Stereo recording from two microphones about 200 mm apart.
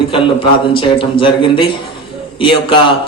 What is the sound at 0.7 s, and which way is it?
A man's voice, 25° left (ahead or behind).